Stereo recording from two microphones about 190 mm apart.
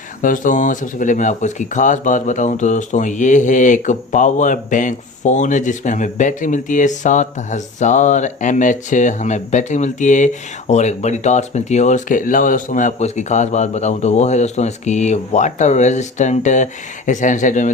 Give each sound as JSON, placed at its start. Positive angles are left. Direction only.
{"t": 0.2, "sound": "speech", "side_deg": 45}